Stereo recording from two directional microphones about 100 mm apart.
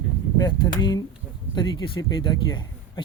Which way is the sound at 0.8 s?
45° left (ahead or behind).